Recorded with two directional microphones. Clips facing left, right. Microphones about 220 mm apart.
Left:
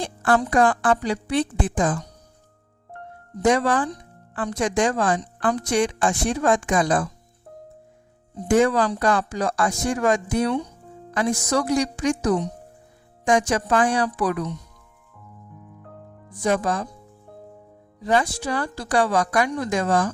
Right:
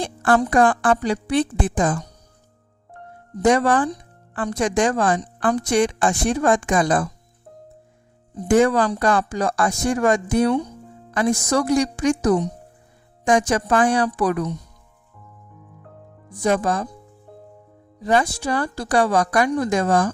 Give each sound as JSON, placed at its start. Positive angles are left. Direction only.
{"t": 0.0, "sound": "a woman's voice", "side_deg": -50}
{"t": 3.4, "sound": "a woman's voice", "side_deg": -50}
{"t": 8.4, "sound": "a woman's voice", "side_deg": -50}
{"t": 16.4, "sound": "a woman's voice", "side_deg": -45}
{"t": 18.0, "sound": "a woman's voice", "side_deg": -50}